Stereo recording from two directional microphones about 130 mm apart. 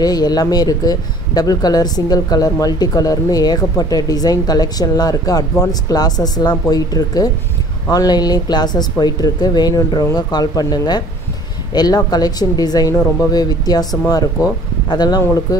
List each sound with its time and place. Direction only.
0.0 s speech: 30° left (ahead or behind)